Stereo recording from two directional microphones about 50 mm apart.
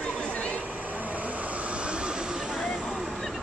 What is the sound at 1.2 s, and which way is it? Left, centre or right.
Vehicle, right.